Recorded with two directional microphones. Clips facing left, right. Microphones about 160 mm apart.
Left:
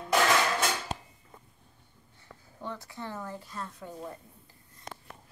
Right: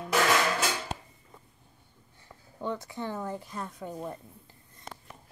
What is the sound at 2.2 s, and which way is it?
Speech, 20° right (ahead or behind).